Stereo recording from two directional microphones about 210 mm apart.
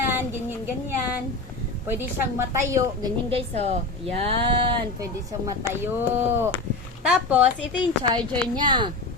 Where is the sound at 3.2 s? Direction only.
25° right (ahead or behind).